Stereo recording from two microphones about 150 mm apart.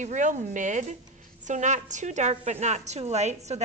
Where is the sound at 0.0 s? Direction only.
55° right (ahead or behind).